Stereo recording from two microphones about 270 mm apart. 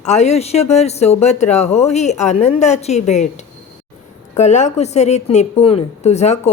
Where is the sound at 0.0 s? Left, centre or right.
Left.